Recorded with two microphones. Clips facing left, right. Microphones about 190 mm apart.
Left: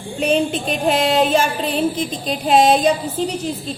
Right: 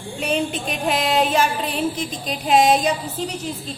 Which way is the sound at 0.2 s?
30° left (ahead or behind).